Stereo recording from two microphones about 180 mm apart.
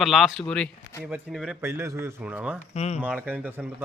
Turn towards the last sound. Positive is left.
turn(degrees=-10)  # may be behind; listen again after turning